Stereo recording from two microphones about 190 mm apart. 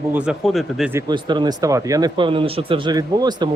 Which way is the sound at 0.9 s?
20° right (ahead or behind).